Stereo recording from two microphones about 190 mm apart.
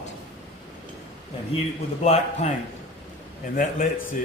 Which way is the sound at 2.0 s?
35° left (ahead or behind).